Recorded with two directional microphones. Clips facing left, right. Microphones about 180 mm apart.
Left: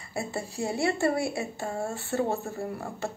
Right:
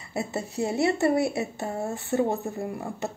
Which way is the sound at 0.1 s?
20° right (ahead or behind).